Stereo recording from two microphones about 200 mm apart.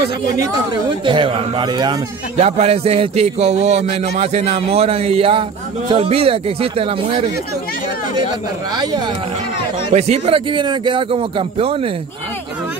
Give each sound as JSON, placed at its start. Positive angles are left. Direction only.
{"t": 0.4, "sound": "speech", "side_deg": -25}
{"t": 2.4, "sound": "a man's voice", "side_deg": -30}
{"t": 9.9, "sound": "speech", "side_deg": -35}